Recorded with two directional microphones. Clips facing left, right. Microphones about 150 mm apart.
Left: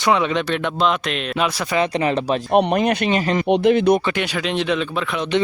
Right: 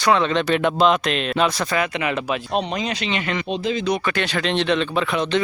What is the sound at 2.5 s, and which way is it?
Speech, 60° left (ahead or behind).